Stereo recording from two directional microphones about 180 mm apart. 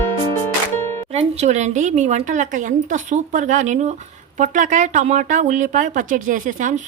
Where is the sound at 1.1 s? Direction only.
35° right (ahead or behind).